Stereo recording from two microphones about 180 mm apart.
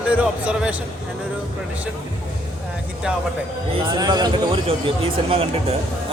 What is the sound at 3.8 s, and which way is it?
Speech, 20° right (ahead or behind).